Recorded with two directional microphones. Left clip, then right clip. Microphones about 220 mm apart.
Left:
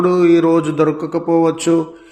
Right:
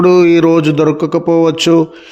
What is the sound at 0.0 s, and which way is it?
A man's voice, 40° right (ahead or behind).